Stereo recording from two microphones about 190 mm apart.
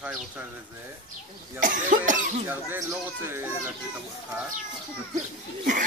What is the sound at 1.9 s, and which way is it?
Cough, 40° right (ahead or behind).